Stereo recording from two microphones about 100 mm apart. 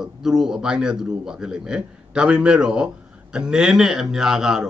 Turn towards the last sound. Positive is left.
turn(degrees=-5)  # may be behind; listen again after turning